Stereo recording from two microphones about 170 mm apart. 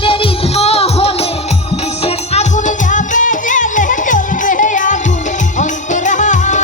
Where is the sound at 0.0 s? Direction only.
30° left (ahead or behind).